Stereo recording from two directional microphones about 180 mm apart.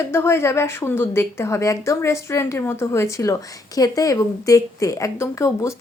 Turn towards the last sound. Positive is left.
turn(degrees=15)  # may be behind; listen again after turning